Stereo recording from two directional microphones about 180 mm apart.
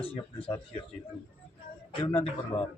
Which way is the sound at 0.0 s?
30° left (ahead or behind).